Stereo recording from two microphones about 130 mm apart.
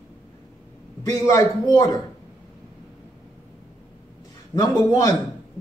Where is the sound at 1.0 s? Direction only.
25° left (ahead or behind).